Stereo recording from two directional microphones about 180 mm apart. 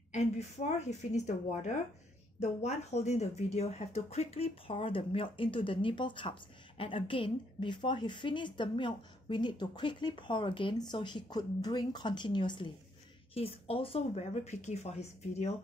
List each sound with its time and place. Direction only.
0.1 s a woman's voice: 40° left (ahead or behind)